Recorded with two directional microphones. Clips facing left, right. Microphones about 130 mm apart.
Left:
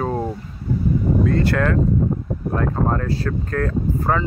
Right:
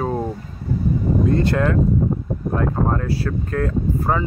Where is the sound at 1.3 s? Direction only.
20° right (ahead or behind).